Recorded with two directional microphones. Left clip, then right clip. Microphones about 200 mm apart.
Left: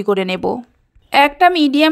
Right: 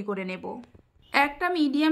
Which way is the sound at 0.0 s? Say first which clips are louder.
Left 15 dB; 40° left (ahead or behind).